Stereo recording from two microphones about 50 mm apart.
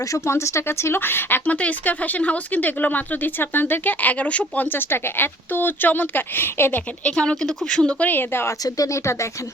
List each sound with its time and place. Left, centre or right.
0.0 s speech: left
0.9 s speech: left
1.5 s speech: left
6.7 s speech: left
7.6 s speech: centre
7.9 s speech: left
8.1 s speech: left
8.4 s speech: left